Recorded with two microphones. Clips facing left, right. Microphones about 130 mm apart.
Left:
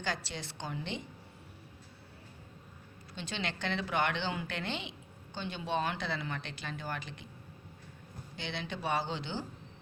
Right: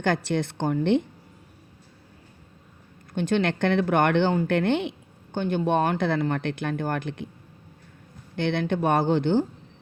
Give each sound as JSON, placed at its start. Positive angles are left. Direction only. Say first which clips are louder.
{"t": 0.0, "sound": "speech", "louder": "right 14 dB", "side_deg": -55}
{"t": 3.2, "sound": "speech", "louder": "right 15 dB", "side_deg": -55}
{"t": 8.4, "sound": "speech", "louder": "right 15 dB", "side_deg": -55}